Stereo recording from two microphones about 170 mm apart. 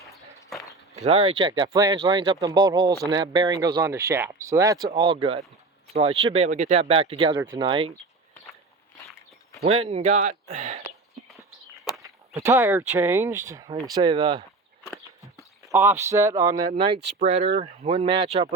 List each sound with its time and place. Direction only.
0.9 s speech: 35° right (ahead or behind)
7.3 s speech: 20° right (ahead or behind)
7.7 s speech: 30° right (ahead or behind)
9.6 s speech: 35° right (ahead or behind)
12.0 s speech: 15° right (ahead or behind)
15.6 s speech: 15° right (ahead or behind)
17.2 s speech: 40° right (ahead or behind)